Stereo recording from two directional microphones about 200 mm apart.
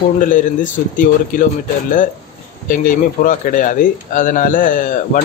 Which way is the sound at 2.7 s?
40° left (ahead or behind).